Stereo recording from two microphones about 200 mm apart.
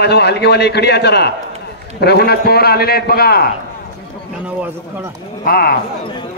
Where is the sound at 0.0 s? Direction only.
55° left (ahead or behind).